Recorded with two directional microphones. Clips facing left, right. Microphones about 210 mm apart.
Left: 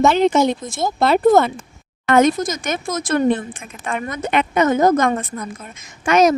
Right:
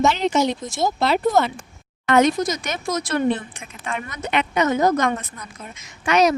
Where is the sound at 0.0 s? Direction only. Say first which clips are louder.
Left 5 dB; 55° left (ahead or behind).